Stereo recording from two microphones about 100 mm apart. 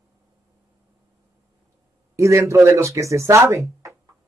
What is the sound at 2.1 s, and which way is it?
Speech, 30° right (ahead or behind).